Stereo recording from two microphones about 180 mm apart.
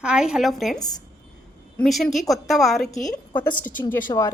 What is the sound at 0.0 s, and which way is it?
Speech, 5° right (ahead or behind).